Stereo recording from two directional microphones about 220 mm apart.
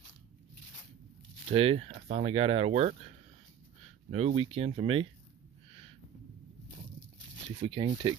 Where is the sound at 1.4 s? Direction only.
25° right (ahead or behind).